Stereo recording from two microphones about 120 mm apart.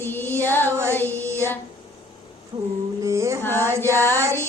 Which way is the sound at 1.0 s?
20° right (ahead or behind).